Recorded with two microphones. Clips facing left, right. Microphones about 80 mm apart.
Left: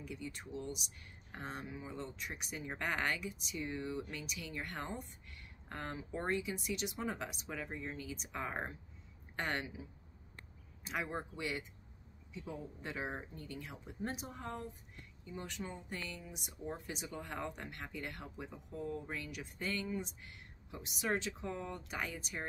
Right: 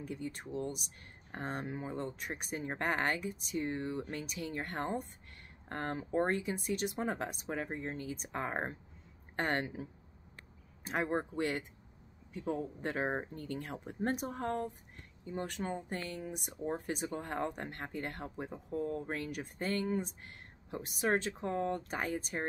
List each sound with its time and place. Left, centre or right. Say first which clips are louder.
0.0 s speech: right 5 dB; right